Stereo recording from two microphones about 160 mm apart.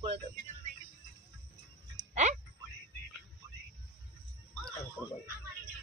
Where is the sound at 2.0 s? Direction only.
20° right (ahead or behind).